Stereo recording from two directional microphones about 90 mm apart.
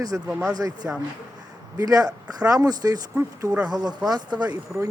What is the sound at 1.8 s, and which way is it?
Speech, 45° right (ahead or behind).